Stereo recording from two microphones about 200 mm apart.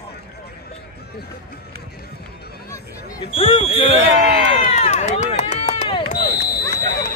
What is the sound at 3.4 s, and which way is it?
Speech, 25° left (ahead or behind).